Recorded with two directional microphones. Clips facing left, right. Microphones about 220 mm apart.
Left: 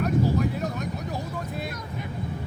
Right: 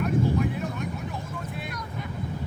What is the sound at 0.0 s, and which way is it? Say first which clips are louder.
Vehicle: left 1 dB; 40° left (ahead or behind).